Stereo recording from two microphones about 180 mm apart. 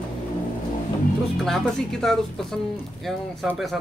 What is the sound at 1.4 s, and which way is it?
Speech, centre (ahead or behind).